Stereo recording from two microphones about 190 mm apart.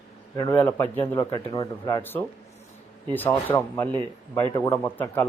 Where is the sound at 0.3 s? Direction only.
20° left (ahead or behind).